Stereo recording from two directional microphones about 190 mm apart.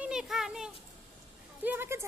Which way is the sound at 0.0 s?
5° right (ahead or behind).